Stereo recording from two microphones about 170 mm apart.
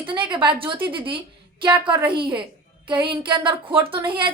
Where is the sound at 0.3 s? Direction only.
30° right (ahead or behind).